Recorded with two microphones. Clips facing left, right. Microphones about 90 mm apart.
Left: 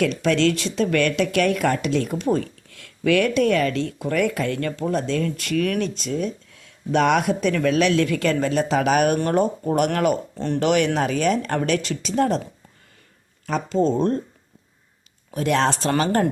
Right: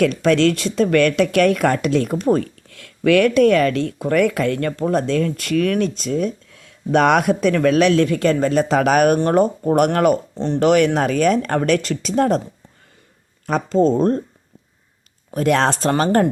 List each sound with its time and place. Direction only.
0.0 s speech: 50° right (ahead or behind)
10.3 s speech: 20° right (ahead or behind)
10.6 s speech: 45° right (ahead or behind)
13.5 s speech: 40° right (ahead or behind)
15.3 s speech: 50° right (ahead or behind)
15.7 s speech: 40° right (ahead or behind)